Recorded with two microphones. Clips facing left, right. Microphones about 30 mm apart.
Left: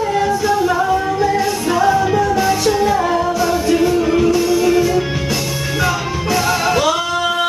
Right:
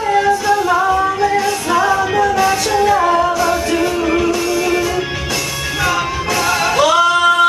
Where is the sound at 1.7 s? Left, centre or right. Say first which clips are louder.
Left 1 dB; centre.